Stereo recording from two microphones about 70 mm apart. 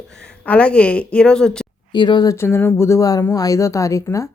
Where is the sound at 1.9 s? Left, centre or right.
Left.